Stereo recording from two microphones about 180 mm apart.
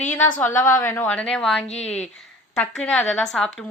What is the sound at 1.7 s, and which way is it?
Speech, 35° left (ahead or behind).